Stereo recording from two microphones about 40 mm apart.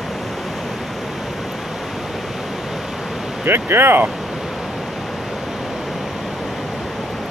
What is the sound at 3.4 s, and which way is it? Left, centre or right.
Speech, right.